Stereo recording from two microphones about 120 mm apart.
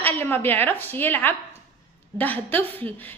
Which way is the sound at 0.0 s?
15° left (ahead or behind).